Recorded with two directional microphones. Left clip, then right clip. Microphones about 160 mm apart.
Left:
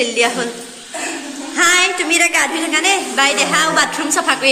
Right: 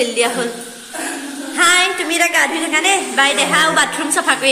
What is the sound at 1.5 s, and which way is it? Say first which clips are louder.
A woman's voice: even; centre (ahead or behind).